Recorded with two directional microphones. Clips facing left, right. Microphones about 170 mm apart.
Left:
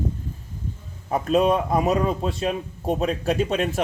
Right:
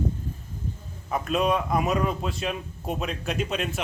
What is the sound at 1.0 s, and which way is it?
A man's voice, 35° left (ahead or behind).